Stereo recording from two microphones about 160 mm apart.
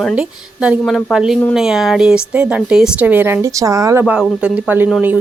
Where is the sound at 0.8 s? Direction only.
5° left (ahead or behind); by 4.0 s 20° right (ahead or behind).